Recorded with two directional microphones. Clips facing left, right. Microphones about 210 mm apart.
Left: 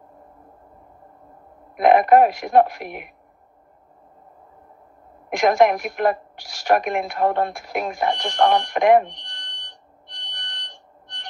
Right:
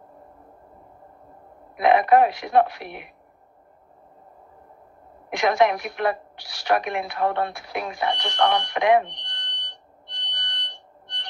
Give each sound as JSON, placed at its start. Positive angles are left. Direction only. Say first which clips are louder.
{"t": 1.8, "sound": "speech", "louder": "left 3 dB", "side_deg": 45}
{"t": 5.3, "sound": "a woman's voice", "louder": "left 3 dB", "side_deg": 45}